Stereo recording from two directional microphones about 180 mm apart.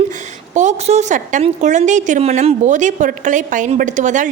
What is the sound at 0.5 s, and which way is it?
A woman's voice, 40° right (ahead or behind).